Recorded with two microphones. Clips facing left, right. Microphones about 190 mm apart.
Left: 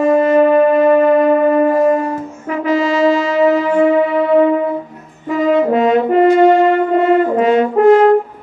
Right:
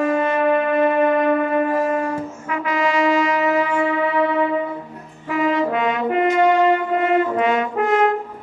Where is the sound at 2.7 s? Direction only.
25° left (ahead or behind).